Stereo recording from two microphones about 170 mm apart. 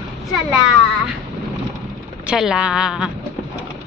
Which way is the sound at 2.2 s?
5° right (ahead or behind).